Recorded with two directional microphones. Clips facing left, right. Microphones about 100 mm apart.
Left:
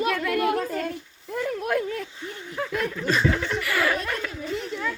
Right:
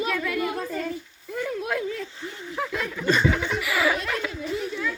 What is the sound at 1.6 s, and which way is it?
Speech, 50° left (ahead or behind).